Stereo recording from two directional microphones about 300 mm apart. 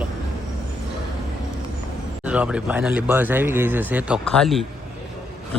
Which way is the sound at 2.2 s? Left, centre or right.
Centre.